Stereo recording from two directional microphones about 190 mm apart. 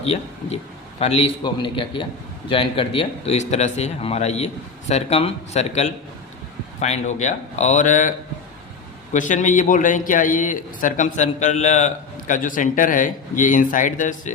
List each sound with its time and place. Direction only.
0.0 s a man's voice: 30° left (ahead or behind)
9.1 s a man's voice: 40° left (ahead or behind)